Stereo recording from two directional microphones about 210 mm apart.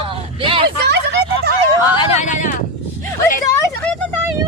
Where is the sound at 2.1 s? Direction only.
35° left (ahead or behind).